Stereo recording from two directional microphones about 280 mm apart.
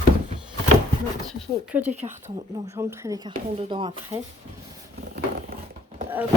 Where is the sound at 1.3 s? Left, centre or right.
Centre.